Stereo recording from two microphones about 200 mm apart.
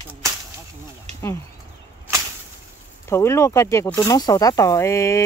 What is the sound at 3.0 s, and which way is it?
Speech, 15° left (ahead or behind).